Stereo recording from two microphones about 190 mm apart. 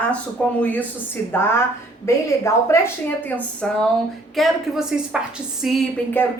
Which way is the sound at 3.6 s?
5° left (ahead or behind).